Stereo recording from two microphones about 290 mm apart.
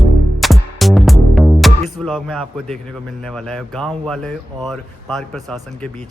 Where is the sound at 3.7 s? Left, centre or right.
Centre.